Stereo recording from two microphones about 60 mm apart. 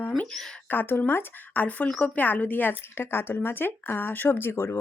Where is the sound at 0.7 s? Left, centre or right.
Left.